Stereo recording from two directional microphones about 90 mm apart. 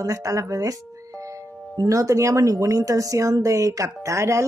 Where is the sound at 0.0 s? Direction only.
35° right (ahead or behind).